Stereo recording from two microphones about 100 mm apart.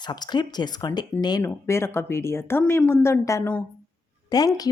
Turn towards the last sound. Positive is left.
turn(degrees=40)  # may be behind; listen again after turning